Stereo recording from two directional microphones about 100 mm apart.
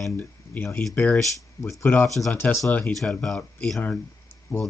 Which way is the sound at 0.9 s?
15° left (ahead or behind).